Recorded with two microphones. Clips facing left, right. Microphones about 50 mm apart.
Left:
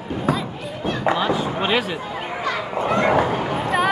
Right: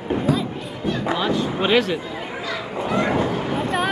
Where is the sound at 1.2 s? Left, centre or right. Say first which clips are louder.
Even; centre.